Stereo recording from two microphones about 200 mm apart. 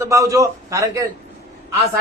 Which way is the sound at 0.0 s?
15° right (ahead or behind).